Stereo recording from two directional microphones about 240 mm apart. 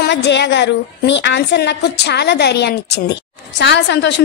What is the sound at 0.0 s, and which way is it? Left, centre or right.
A woman's voice, left.